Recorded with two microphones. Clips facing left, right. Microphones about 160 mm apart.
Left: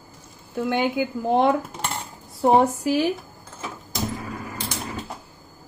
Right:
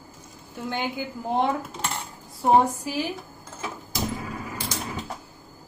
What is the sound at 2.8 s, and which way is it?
Speech, 75° left (ahead or behind).